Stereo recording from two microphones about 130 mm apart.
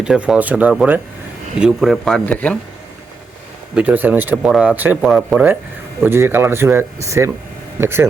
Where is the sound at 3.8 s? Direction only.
10° right (ahead or behind).